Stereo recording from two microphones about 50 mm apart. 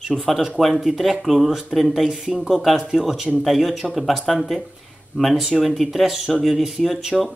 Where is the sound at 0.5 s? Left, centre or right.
Centre.